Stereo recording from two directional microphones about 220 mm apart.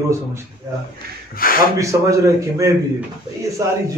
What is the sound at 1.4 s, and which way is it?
Speech, 40° left (ahead or behind).